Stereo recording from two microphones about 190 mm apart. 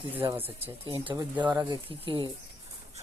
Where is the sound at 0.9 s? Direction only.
30° right (ahead or behind).